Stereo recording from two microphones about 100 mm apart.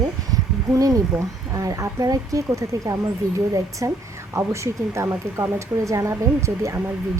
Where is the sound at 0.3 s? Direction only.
35° right (ahead or behind).